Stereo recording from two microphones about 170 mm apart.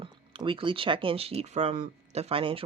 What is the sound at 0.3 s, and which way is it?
Speech, 30° right (ahead or behind).